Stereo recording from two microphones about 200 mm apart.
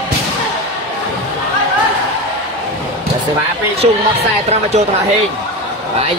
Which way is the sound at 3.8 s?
30° right (ahead or behind).